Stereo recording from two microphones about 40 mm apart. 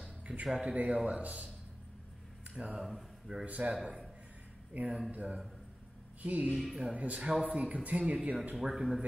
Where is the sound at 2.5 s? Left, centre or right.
Right.